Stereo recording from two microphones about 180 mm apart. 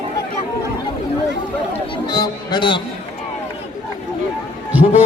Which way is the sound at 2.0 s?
20° left (ahead or behind).